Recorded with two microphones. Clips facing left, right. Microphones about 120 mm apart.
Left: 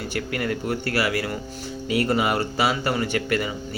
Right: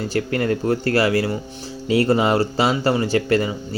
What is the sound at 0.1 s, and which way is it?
Speech, 35° right (ahead or behind).